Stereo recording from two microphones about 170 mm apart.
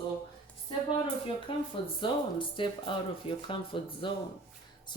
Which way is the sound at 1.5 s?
30° left (ahead or behind).